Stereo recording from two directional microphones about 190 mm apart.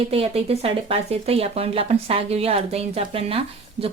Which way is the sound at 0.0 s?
30° right (ahead or behind).